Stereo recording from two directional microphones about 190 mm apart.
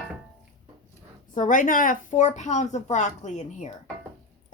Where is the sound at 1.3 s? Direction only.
45° left (ahead or behind).